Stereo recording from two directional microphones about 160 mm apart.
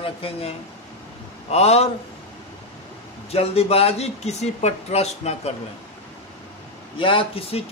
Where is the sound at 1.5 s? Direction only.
40° left (ahead or behind).